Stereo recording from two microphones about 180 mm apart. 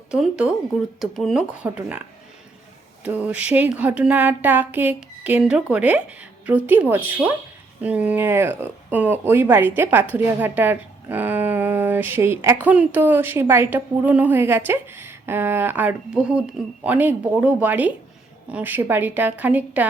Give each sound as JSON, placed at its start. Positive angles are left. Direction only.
{"t": 0.1, "sound": "speech", "side_deg": -5}